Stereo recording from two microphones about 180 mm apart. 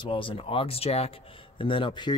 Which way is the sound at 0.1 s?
30° left (ahead or behind).